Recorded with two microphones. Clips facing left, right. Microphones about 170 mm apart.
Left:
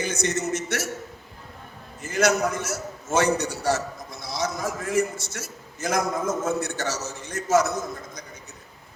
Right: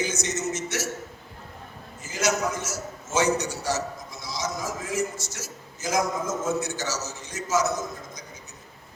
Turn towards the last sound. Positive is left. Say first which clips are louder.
# left 4 dB
turn(degrees=55)  # may be behind; listen again after turning